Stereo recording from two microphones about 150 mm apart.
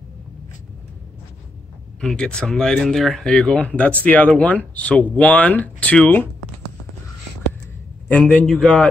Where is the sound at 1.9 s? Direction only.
5° left (ahead or behind).